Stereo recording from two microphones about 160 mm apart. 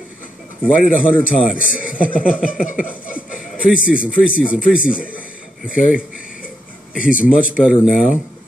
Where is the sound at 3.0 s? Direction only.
55° left (ahead or behind).